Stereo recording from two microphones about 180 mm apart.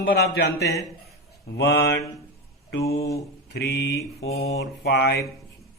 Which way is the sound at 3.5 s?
70° left (ahead or behind).